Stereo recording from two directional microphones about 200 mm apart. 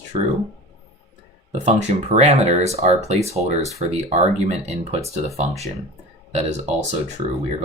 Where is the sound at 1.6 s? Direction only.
35° right (ahead or behind).